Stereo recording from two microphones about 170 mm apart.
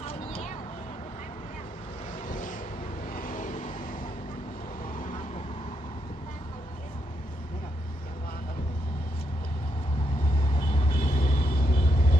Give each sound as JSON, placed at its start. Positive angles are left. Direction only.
{"t": 3.1, "sound": "vehicle", "side_deg": 55}
{"t": 4.9, "sound": "vehicle", "side_deg": 50}
{"t": 10.5, "sound": "vehicle", "side_deg": 35}
{"t": 11.0, "sound": "vehicle", "side_deg": 50}